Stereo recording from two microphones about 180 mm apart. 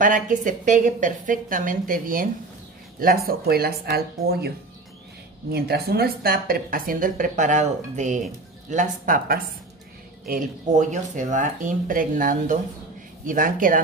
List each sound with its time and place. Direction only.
0.0 s a woman's voice: 45° right (ahead or behind)
5.5 s a woman's voice: 60° right (ahead or behind)